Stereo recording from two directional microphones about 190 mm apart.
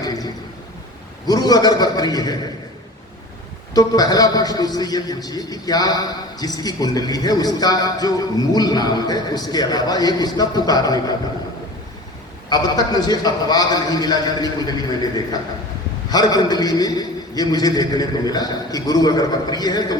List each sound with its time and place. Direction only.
0.0 s a sound: 20° left (ahead or behind)
1.3 s a man's voice: 20° left (ahead or behind)
3.8 s a man's voice: 20° left (ahead or behind)
12.5 s a man's voice: 20° left (ahead or behind)